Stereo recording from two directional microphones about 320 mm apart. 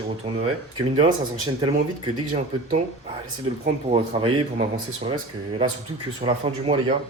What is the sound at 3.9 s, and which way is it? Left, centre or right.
Speech, centre.